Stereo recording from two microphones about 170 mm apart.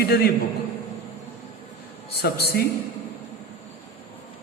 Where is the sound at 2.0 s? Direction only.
70° left (ahead or behind).